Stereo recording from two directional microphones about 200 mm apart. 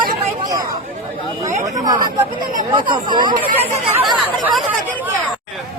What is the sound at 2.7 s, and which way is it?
Speech, 25° right (ahead or behind).